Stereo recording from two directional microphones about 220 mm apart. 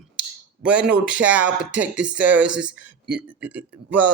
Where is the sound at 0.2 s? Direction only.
5° right (ahead or behind).